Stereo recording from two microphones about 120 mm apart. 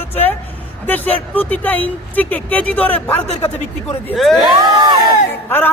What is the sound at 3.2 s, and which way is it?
Speech, 65° left (ahead or behind).